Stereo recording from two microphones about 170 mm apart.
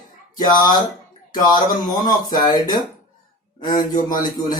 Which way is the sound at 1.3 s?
25° left (ahead or behind).